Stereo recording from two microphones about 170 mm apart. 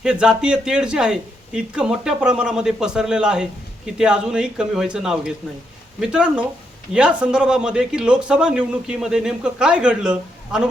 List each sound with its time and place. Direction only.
0.0 s a man's voice: 5° right (ahead or behind)